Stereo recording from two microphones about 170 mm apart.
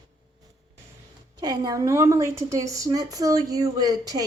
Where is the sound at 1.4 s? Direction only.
25° right (ahead or behind).